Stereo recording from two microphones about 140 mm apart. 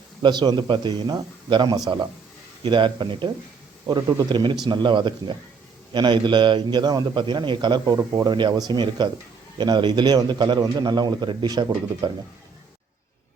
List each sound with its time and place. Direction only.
0.2 s a man's voice: 30° right (ahead or behind)